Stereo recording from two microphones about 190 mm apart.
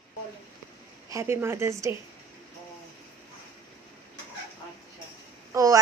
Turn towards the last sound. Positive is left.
turn(degrees=-15)  # may be behind; listen again after turning